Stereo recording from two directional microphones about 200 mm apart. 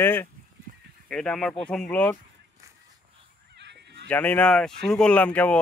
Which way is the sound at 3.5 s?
60° right (ahead or behind).